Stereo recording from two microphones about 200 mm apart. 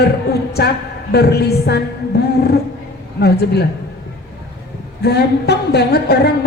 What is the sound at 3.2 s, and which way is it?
Speech, 55° left (ahead or behind).